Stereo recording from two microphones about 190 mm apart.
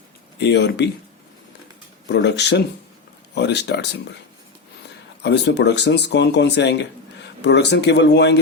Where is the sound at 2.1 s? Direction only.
65° left (ahead or behind).